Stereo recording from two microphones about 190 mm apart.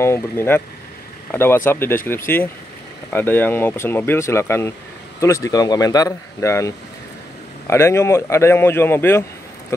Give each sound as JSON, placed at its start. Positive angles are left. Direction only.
{"t": 0.0, "sound": "speech", "side_deg": 15}